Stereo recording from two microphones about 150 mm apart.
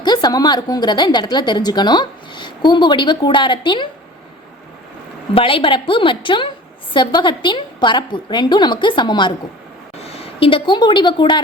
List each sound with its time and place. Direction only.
0.0 s a woman's voice: 30° left (ahead or behind)
5.3 s a woman's voice: 35° left (ahead or behind)